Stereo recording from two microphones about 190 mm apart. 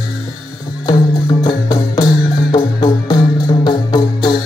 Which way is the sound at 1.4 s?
20° left (ahead or behind).